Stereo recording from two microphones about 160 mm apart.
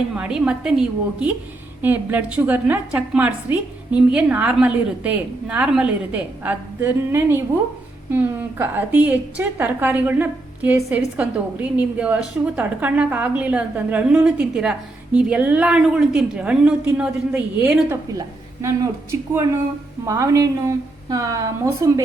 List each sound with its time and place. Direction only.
0.1 s a woman's voice: 5° right (ahead or behind)
18.1 s a woman's voice: 20° right (ahead or behind)